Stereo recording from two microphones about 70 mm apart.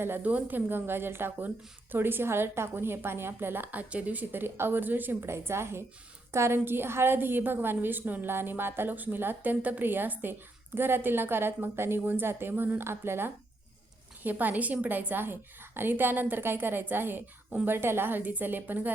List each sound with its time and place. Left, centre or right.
0.2 s a woman's voice: right